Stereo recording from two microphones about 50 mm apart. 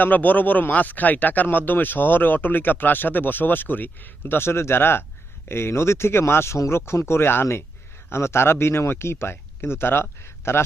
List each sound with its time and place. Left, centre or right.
0.0 s speech: left